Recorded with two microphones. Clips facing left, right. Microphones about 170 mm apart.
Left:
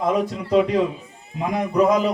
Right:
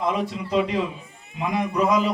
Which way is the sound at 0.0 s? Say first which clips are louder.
Left 4 dB; 45° left (ahead or behind).